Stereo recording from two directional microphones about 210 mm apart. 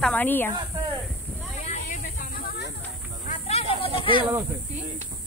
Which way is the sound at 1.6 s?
40° left (ahead or behind).